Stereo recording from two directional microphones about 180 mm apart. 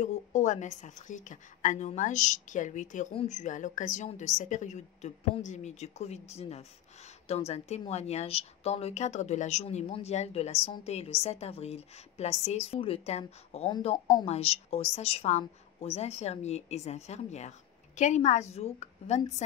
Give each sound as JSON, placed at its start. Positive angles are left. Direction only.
{"t": 0.0, "sound": "a woman's voice", "side_deg": 40}
{"t": 14.2, "sound": "speech", "side_deg": 35}